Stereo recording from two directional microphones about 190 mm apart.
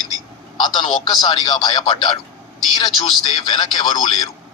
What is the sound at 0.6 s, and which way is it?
Speech, 25° left (ahead or behind).